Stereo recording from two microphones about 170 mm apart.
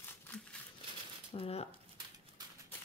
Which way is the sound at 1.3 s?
35° left (ahead or behind).